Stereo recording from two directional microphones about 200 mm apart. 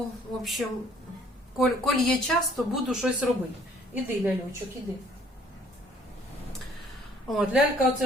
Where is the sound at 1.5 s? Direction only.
Centre (ahead or behind).